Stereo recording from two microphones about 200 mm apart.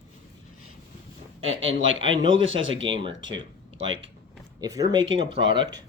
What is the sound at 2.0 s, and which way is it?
Speech, 25° right (ahead or behind).